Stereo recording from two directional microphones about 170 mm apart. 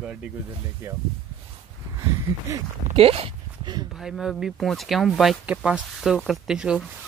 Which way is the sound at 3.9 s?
Centre (ahead or behind).